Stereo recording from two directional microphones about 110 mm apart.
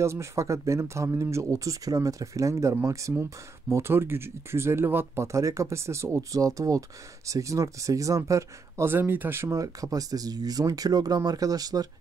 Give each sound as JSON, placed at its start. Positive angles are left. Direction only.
{"t": 0.0, "sound": "speech", "side_deg": -25}